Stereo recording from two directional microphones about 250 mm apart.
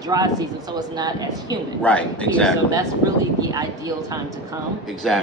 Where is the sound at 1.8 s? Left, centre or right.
Centre.